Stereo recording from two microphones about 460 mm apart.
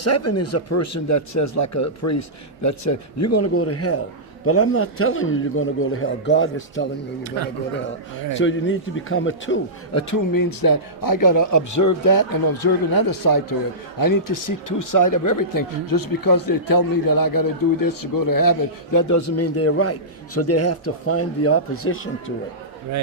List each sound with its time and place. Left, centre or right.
0.0 s a man's voice: left
8.4 s speech: left